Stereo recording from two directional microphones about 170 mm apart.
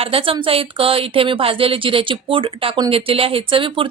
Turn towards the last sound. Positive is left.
turn(degrees=-30)  # may be behind; listen again after turning